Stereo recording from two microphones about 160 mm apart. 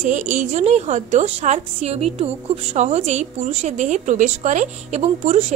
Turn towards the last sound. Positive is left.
turn(degrees=-40)  # may be behind; listen again after turning